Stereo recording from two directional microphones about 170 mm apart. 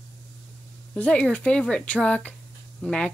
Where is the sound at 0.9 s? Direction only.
5° left (ahead or behind).